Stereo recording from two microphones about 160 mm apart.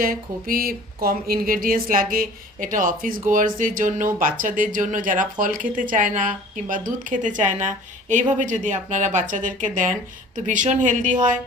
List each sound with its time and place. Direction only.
0.0 s speech: 65° right (ahead or behind)